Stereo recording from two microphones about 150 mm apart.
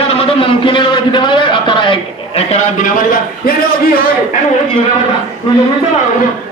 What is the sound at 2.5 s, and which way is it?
A man's voice, 70° left (ahead or behind).